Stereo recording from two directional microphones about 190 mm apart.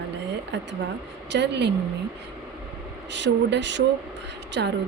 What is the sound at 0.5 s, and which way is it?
Speech, 65° right (ahead or behind).